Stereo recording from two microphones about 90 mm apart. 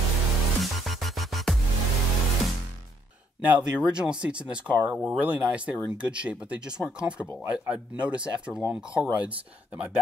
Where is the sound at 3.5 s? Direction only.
10° right (ahead or behind).